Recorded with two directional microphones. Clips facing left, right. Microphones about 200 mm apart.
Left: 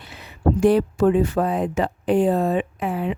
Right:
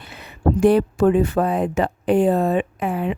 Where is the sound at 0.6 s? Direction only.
60° right (ahead or behind).